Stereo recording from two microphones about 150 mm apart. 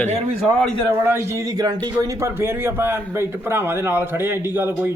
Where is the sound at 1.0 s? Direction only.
15° right (ahead or behind).